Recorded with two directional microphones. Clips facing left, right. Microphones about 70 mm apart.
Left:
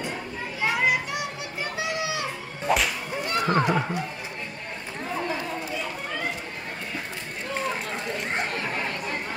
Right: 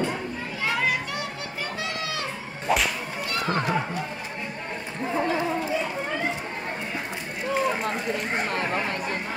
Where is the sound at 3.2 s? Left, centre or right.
Left.